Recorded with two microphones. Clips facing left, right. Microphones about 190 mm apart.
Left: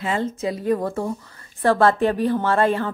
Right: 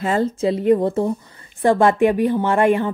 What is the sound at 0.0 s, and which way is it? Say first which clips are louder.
Speech: right 5 dB; 45° right (ahead or behind).